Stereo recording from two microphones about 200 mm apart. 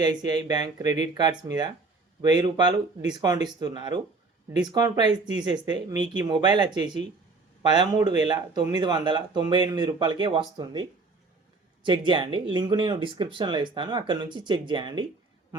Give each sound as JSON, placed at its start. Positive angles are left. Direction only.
{"t": 0.0, "sound": "speech", "side_deg": -20}